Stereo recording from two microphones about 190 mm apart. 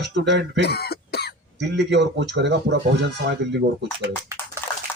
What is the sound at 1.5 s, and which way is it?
A man's voice, 65° right (ahead or behind).